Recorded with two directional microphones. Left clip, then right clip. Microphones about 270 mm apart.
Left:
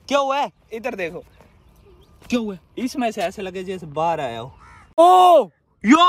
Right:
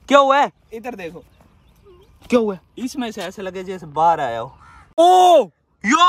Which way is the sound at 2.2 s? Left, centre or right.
Centre.